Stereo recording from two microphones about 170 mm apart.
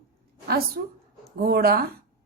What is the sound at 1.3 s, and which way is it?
Speech, 60° right (ahead or behind).